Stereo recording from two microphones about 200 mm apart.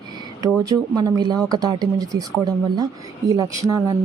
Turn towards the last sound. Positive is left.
turn(degrees=-20)  # may be behind; listen again after turning